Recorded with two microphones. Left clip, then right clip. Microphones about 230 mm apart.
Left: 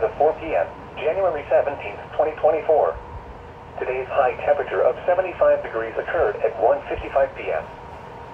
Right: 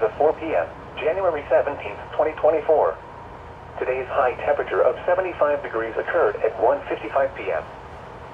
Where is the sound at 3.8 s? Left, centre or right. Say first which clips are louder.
Left 1 dB; right.